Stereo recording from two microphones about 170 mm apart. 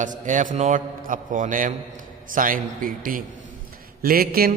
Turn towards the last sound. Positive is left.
turn(degrees=-60)  # may be behind; listen again after turning